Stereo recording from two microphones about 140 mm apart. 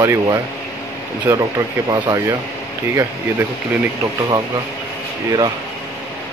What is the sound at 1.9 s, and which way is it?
Speech, 25° right (ahead or behind).